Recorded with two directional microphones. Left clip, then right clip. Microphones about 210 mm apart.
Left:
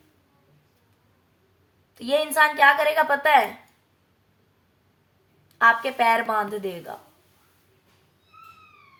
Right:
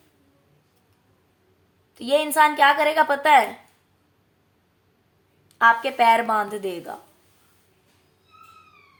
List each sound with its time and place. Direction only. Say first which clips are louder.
2.0 s a woman's voice: right 2 dB; 20° right (ahead or behind)
5.5 s a woman's voice: right 1 dB; 25° right (ahead or behind)